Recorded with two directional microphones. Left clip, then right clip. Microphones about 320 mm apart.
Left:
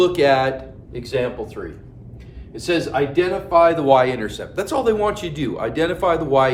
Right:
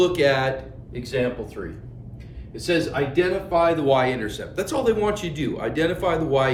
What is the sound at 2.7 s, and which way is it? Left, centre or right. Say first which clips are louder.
Speech: left 3 dB; centre.